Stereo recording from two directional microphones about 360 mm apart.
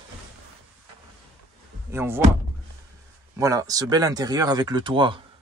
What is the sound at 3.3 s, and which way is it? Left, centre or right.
Speech, centre.